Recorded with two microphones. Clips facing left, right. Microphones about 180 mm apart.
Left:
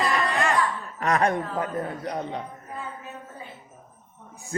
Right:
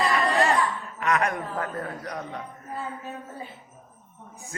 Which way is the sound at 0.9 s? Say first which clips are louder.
Left 3 dB; 35° left (ahead or behind).